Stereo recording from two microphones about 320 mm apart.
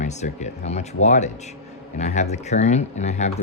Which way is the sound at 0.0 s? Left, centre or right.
Left.